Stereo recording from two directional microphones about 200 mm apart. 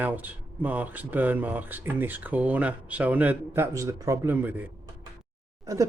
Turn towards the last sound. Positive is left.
turn(degrees=-15)  # may be behind; listen again after turning